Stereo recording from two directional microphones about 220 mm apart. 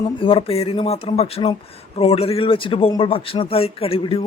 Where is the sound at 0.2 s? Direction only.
25° left (ahead or behind).